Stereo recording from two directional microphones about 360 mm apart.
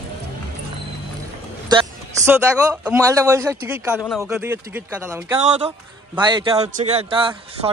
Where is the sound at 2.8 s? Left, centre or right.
Centre.